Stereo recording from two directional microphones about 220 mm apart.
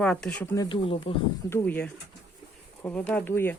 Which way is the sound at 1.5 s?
10° left (ahead or behind).